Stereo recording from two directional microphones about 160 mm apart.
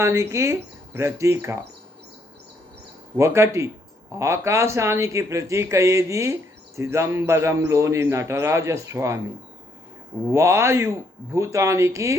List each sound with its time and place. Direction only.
0.0 s a man's voice: 15° right (ahead or behind)
3.2 s a man's voice: 15° right (ahead or behind)
10.3 s a man's voice: 15° right (ahead or behind)